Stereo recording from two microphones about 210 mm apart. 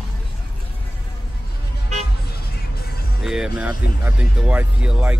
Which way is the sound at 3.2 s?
5° right (ahead or behind).